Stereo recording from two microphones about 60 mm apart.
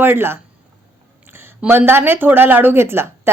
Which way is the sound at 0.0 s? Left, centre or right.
Right.